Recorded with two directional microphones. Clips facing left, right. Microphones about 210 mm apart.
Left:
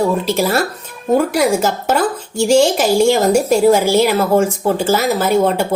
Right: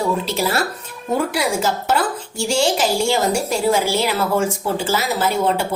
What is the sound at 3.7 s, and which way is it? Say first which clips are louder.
A woman's voice: left 6 dB; 45° left (ahead or behind).